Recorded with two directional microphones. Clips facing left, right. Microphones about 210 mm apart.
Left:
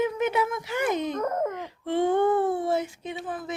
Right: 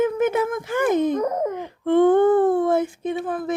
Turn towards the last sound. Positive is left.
turn(degrees=-55)  # may be behind; listen again after turning